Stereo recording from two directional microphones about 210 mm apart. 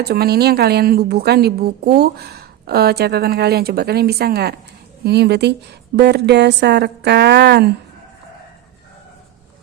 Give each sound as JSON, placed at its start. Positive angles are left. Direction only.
{"t": 0.0, "sound": "a woman's voice", "side_deg": -50}